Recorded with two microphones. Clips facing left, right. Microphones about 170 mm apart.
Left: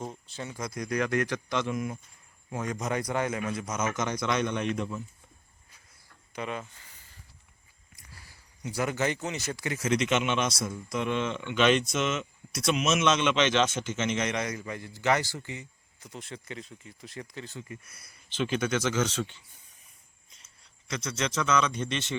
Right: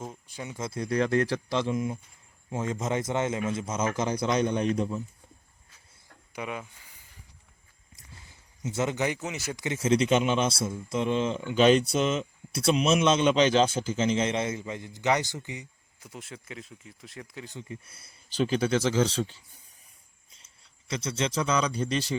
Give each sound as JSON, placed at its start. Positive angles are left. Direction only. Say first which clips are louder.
{"t": 0.3, "sound": "speech", "louder": "right 1 dB", "side_deg": -15}
{"t": 6.3, "sound": "speech", "louder": "even", "side_deg": -10}
{"t": 7.9, "sound": "a sound", "louder": "right 1 dB", "side_deg": -20}
{"t": 9.1, "sound": "speech", "louder": "even", "side_deg": -5}
{"t": 17.4, "sound": "speech", "louder": "right 1 dB", "side_deg": -20}